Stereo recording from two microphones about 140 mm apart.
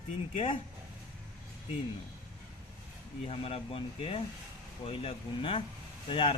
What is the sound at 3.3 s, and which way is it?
A man's voice, 45° left (ahead or behind).